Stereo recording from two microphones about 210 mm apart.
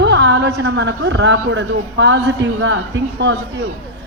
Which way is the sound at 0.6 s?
55° right (ahead or behind).